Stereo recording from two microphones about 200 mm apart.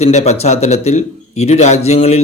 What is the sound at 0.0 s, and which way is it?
A man's voice, 35° left (ahead or behind).